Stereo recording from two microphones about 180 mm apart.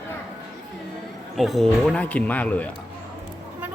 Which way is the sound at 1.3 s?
Centre (ahead or behind).